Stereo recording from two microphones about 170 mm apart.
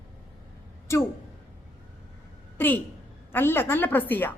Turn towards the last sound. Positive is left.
turn(degrees=10)  # may be behind; listen again after turning